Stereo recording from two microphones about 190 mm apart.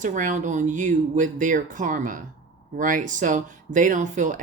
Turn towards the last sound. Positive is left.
turn(degrees=-40)  # may be behind; listen again after turning